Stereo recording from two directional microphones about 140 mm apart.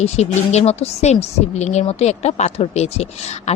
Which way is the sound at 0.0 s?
50° left (ahead or behind).